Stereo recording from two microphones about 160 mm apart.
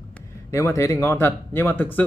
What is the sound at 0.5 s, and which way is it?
Speech, 20° left (ahead or behind).